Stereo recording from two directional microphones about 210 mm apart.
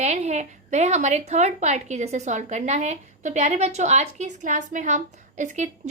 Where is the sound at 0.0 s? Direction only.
30° right (ahead or behind).